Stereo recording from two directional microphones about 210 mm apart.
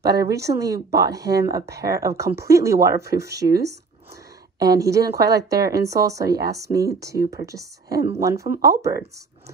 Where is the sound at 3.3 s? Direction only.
50° right (ahead or behind).